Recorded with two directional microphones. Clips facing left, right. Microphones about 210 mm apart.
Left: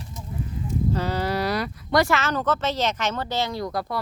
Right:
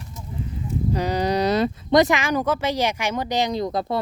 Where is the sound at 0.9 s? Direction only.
15° right (ahead or behind).